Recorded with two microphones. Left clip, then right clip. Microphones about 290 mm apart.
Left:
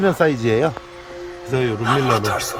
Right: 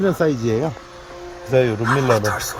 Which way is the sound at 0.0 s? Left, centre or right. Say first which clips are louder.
Left 2 dB; centre.